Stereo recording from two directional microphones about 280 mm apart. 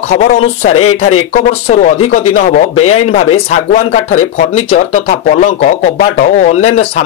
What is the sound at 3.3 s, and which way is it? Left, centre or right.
Speech, left.